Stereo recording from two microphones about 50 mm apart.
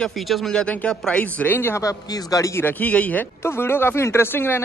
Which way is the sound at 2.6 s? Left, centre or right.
Left.